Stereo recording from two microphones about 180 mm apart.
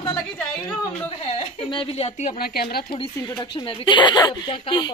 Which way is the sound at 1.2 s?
35° left (ahead or behind).